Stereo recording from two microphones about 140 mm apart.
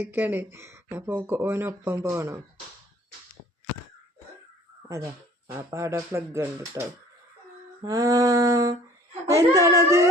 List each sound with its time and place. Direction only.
0.0 s speech: 15° right (ahead or behind)
5.5 s speech: 20° right (ahead or behind)